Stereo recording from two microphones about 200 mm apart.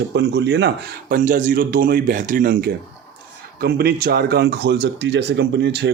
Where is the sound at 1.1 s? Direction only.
40° right (ahead or behind).